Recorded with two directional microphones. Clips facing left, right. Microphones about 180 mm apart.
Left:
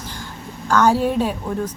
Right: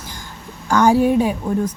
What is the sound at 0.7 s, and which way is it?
Speech, 15° right (ahead or behind).